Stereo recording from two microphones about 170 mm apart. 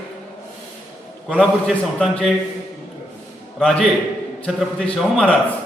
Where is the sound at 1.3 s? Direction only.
5° left (ahead or behind).